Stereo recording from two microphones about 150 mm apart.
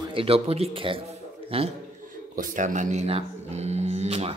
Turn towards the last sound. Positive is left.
turn(degrees=-45)  # may be behind; listen again after turning